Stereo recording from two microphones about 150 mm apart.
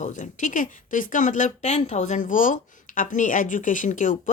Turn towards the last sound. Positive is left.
turn(degrees=60)  # may be behind; listen again after turning